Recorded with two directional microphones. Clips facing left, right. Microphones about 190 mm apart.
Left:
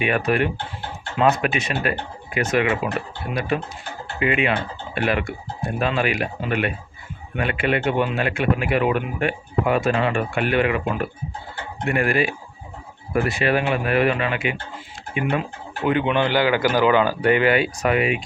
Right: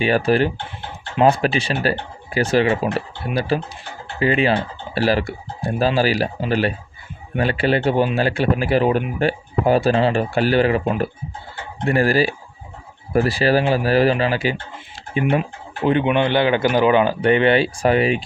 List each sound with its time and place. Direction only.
0.0 s a man's voice: 30° right (ahead or behind)